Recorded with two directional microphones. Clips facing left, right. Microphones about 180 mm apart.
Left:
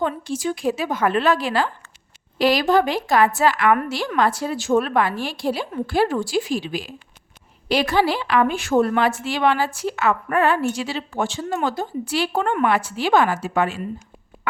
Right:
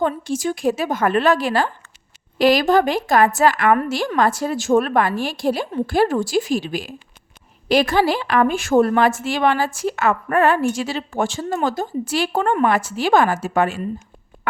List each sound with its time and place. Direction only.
0.0 s a woman's voice: 45° right (ahead or behind)